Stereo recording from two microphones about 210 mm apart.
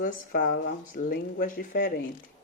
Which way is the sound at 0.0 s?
45° left (ahead or behind).